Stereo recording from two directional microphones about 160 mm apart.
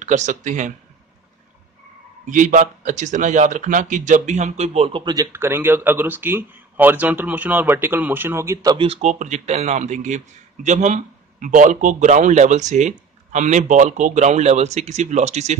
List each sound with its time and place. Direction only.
0.0 s a man's voice: 50° right (ahead or behind)
2.2 s a man's voice: 55° right (ahead or behind)
5.0 s a man's voice: 20° right (ahead or behind)
8.7 s a man's voice: 40° right (ahead or behind)